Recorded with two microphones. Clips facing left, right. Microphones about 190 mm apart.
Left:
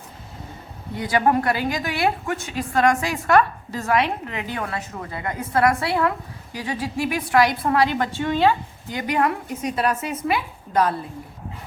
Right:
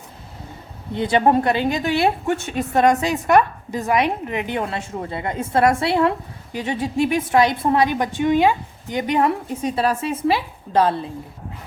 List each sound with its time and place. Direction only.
0.9 s a woman's voice: 25° right (ahead or behind)